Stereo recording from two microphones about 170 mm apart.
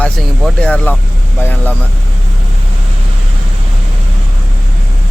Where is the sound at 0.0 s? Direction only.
5° left (ahead or behind).